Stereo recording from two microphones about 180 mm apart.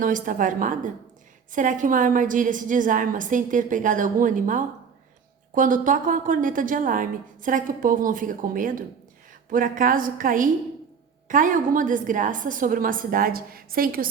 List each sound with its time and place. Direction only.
0.0 s a woman's voice: 50° right (ahead or behind)